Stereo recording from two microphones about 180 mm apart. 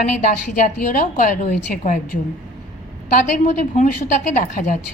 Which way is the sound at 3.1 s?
45° left (ahead or behind).